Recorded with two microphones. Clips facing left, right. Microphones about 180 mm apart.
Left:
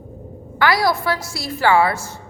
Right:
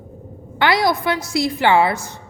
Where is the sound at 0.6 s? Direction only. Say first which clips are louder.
Right 1 dB; 20° right (ahead or behind).